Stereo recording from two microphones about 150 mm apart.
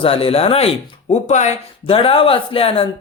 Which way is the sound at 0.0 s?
40° left (ahead or behind).